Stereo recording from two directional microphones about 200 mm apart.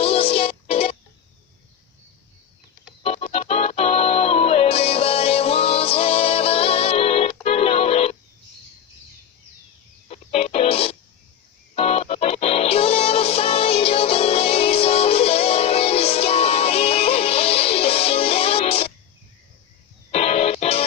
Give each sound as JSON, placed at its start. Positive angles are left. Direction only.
{"t": 0.0, "sound": "music", "side_deg": 30}
{"t": 3.0, "sound": "music", "side_deg": 30}
{"t": 10.1, "sound": "music", "side_deg": 30}
{"t": 20.1, "sound": "music", "side_deg": 30}